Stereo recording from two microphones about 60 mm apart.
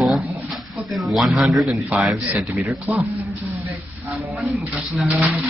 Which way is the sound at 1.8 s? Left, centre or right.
Centre.